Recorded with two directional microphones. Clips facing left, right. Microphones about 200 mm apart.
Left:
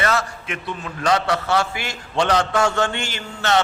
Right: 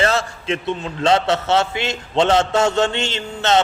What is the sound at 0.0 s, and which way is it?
A man's voice, 30° right (ahead or behind).